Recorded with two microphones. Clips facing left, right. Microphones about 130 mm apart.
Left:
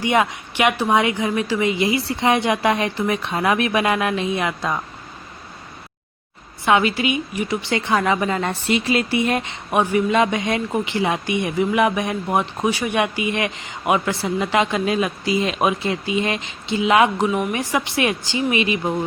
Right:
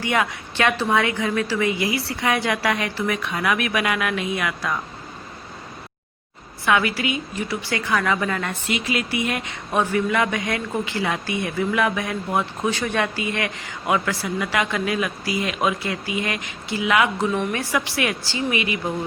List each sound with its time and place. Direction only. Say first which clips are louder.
0.0 s a woman's voice: left 4 dB; 20° left (ahead or behind)
6.7 s a woman's voice: left 3 dB; 25° left (ahead or behind)
9.7 s a woman's voice: left 3 dB; 15° left (ahead or behind)